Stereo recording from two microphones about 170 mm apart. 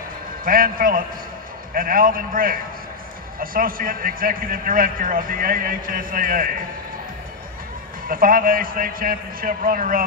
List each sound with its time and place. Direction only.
0.5 s a man's voice: 55° right (ahead or behind)
8.1 s a man's voice: 55° right (ahead or behind)